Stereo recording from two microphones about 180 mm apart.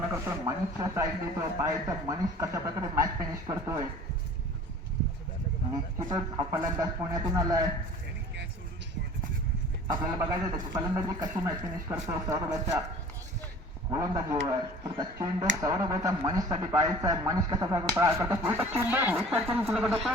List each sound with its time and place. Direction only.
0.1 s a man's voice: 15° right (ahead or behind)
5.7 s a man's voice: 20° right (ahead or behind)
10.2 s a man's voice: 15° right (ahead or behind)
13.9 s a man's voice: 20° right (ahead or behind); by 20.1 s centre (ahead or behind)